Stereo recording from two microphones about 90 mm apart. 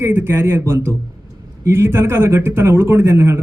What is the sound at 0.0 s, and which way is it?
A man's voice, 25° right (ahead or behind).